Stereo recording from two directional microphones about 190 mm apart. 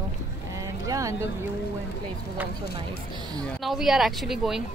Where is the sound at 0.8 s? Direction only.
15° right (ahead or behind).